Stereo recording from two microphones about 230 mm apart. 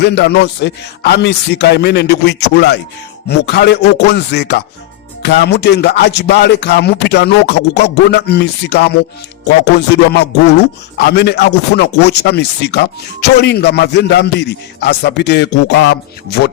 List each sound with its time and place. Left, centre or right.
0.0 s speech: left